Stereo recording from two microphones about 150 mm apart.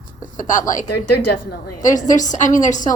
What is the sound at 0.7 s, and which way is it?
Speech, 75° left (ahead or behind).